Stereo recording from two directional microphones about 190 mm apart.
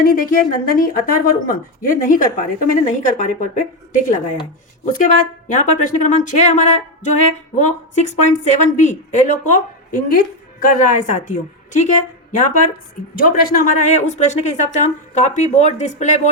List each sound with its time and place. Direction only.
0.0 s a woman's voice: 50° left (ahead or behind)
13.1 s speech: 40° left (ahead or behind)